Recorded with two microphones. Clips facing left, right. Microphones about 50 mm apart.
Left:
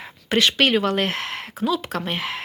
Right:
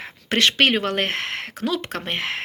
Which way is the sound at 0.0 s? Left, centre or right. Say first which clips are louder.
Even; right.